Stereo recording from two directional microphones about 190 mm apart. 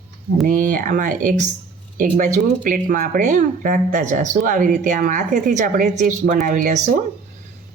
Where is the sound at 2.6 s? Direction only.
45° right (ahead or behind).